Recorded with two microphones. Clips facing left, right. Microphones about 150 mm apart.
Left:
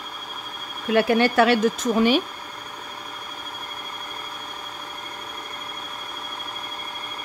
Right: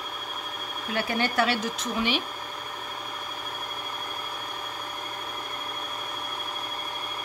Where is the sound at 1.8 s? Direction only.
45° left (ahead or behind).